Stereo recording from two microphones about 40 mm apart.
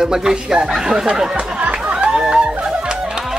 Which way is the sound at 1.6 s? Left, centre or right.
Right.